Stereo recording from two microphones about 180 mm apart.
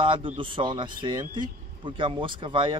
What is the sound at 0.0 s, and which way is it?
Speech, 30° right (ahead or behind).